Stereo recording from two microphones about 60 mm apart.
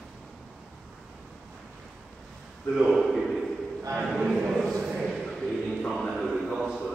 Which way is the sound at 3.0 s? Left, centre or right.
Centre.